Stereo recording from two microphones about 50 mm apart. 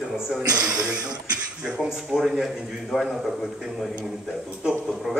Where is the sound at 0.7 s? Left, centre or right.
Centre.